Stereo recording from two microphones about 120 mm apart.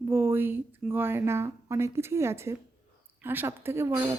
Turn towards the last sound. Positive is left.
turn(degrees=-20)  # may be behind; listen again after turning